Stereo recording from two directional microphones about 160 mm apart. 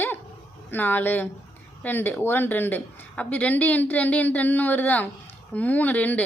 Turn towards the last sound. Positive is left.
turn(degrees=10)  # may be behind; listen again after turning